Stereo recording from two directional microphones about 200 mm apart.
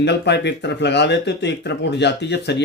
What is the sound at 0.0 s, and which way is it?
Speech, 60° left (ahead or behind).